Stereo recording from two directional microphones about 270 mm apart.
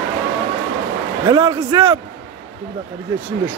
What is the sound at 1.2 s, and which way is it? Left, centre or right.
Speech, centre.